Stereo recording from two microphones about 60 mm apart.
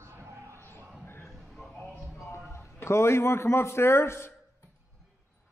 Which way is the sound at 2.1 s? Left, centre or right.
Left.